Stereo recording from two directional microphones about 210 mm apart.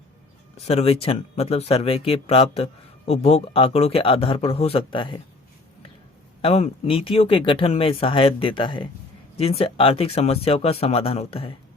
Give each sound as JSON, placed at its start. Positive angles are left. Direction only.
{"t": 0.5, "sound": "speech", "side_deg": 30}
{"t": 6.4, "sound": "speech", "side_deg": 30}